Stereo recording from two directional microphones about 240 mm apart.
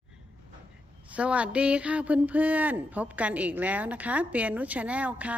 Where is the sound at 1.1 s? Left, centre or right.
Centre.